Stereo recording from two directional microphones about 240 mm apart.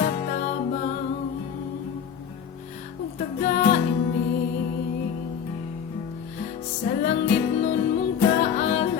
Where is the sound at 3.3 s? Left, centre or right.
Left.